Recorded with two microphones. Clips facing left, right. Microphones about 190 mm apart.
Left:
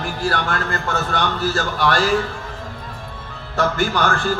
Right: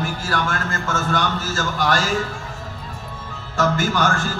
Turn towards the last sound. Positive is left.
turn(degrees=-45)  # may be behind; listen again after turning